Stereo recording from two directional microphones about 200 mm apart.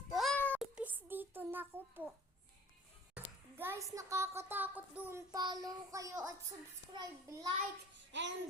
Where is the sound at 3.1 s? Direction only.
10° right (ahead or behind).